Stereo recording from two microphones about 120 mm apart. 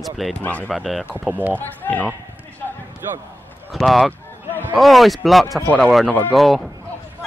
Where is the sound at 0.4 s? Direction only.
10° left (ahead or behind).